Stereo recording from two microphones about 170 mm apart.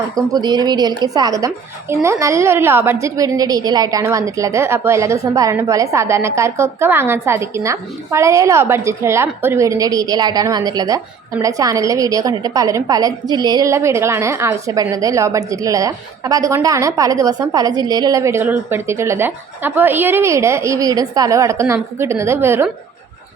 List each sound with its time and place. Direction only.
0.2 s a woman's voice: 20° right (ahead or behind)